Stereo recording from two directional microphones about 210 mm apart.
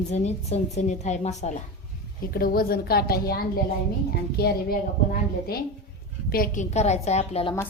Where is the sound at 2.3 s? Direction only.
45° left (ahead or behind); by 7.5 s 30° left (ahead or behind).